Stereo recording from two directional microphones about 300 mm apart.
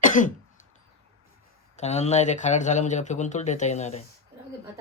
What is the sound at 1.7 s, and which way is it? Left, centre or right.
Speech, left.